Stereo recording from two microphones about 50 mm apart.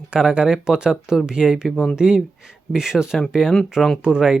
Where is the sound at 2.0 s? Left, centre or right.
Centre.